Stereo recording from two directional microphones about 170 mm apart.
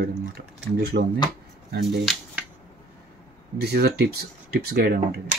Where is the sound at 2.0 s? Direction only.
5° right (ahead or behind).